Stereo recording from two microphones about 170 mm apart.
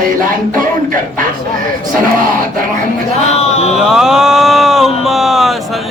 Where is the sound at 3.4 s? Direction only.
40° left (ahead or behind).